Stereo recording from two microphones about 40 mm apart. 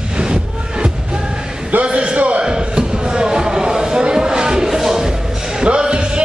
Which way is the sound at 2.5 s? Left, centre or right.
Centre.